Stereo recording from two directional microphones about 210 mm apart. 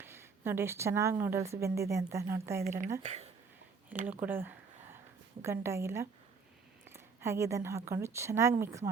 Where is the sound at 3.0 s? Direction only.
30° right (ahead or behind).